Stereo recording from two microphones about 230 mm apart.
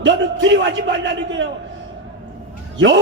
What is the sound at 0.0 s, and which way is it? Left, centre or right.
A man's voice, right.